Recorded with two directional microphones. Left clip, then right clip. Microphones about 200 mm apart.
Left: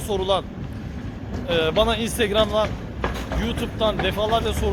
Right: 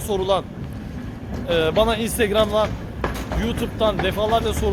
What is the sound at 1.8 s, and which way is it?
Speech, 10° right (ahead or behind).